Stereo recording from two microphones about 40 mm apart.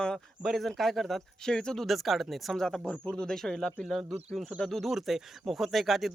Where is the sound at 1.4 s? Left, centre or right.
Centre.